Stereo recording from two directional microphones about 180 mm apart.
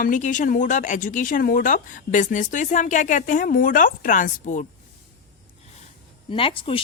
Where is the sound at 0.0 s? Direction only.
45° left (ahead or behind).